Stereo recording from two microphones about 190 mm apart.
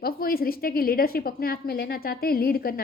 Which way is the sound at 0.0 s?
50° left (ahead or behind).